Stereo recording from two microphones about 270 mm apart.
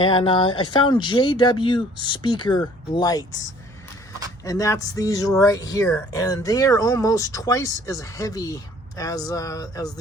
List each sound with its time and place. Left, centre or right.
0.0 s speech: centre
4.4 s speech: centre